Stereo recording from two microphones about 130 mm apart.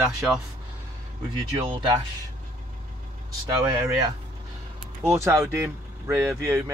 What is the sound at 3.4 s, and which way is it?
Speech, 25° right (ahead or behind).